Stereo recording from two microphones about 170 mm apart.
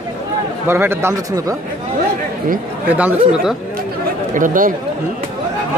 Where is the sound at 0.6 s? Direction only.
15° right (ahead or behind).